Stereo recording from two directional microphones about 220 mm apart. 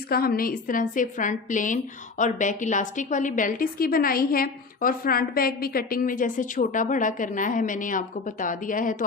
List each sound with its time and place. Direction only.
0.1 s a woman's voice: 45° left (ahead or behind)